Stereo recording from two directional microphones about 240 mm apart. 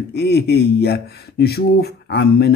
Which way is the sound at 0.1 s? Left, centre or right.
Left.